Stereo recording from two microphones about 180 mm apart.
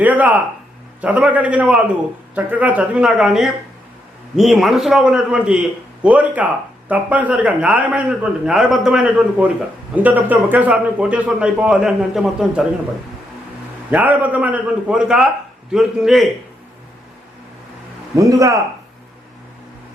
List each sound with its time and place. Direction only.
0.0 s a man's voice: 10° right (ahead or behind)
13.9 s a man's voice: 10° right (ahead or behind)
18.2 s speech: 20° right (ahead or behind)